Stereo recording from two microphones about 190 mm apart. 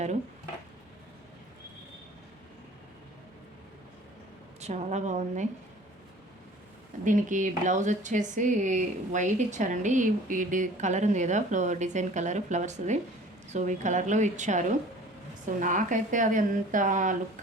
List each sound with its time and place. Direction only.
4.6 s speech: 35° right (ahead or behind)
7.0 s speech: 40° right (ahead or behind)